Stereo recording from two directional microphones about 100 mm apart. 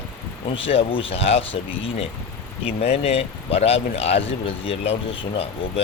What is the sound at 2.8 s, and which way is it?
Speech, 90° left.